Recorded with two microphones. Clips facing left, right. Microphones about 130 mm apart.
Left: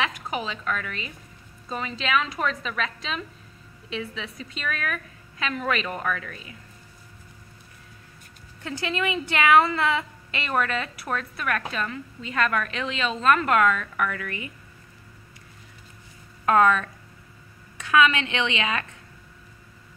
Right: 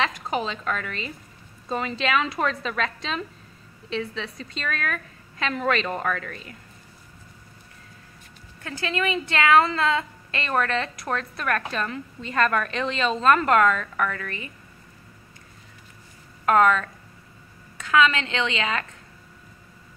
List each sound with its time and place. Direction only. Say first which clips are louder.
0.0 s a woman's voice: right 3 dB; 5° left (ahead or behind)
5.9 s speech: right 2 dB; 25° right (ahead or behind)
6.1 s a woman's voice: right 2 dB; 10° left (ahead or behind)
8.6 s a woman's voice: right 1 dB; 20° left (ahead or behind)
16.4 s a woman's voice: right 1 dB; 15° left (ahead or behind)
17.9 s a woman's voice: even; 15° left (ahead or behind)